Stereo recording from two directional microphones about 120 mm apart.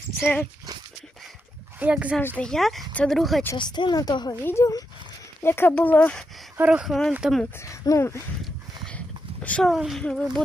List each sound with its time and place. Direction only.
1.8 s speech: 10° right (ahead or behind)
2.2 s speech: 10° left (ahead or behind)
3.6 s a woman's voice: 40° left (ahead or behind)
4.4 s speech: 20° left (ahead or behind)
6.6 s speech: 10° right (ahead or behind)
7.6 s speech: 25° left (ahead or behind)
8.8 s horse: 10° left (ahead or behind)
9.6 s speech: centre (ahead or behind)